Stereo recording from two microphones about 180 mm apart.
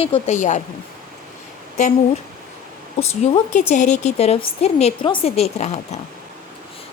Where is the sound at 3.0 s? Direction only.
35° left (ahead or behind).